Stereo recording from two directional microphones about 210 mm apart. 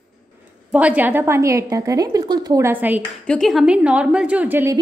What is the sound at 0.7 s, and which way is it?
A woman's voice, 5° right (ahead or behind).